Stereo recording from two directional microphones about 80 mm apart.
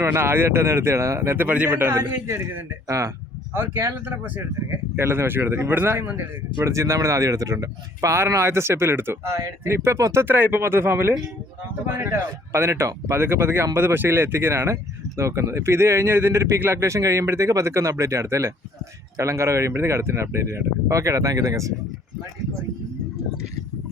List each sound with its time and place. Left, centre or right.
0.0 s speech: right
2.8 s speech: right
3.5 s speech: right